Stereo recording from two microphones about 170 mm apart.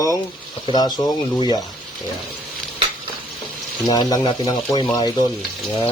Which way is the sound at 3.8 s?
25° left (ahead or behind).